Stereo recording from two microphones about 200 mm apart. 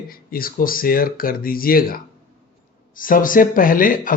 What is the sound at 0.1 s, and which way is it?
Speech, 45° left (ahead or behind).